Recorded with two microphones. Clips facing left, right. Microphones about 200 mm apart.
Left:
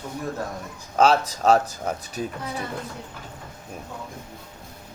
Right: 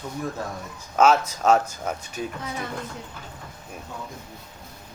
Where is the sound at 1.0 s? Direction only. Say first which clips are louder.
Even; 35° left (ahead or behind).